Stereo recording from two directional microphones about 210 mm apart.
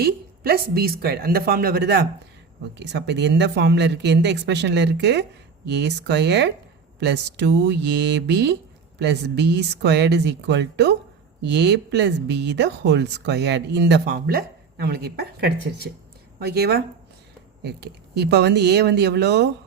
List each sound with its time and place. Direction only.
0.0 s speech: 45° right (ahead or behind)